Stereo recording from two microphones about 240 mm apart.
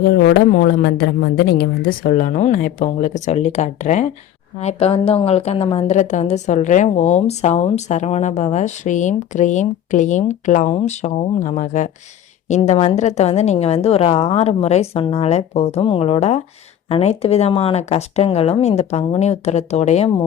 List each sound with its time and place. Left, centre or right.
0.2 s a woman's voice: left